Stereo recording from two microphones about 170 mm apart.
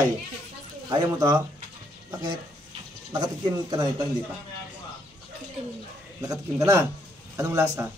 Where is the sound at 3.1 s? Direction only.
25° right (ahead or behind).